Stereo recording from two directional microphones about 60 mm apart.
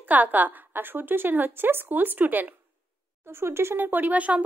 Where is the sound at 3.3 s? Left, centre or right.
Right.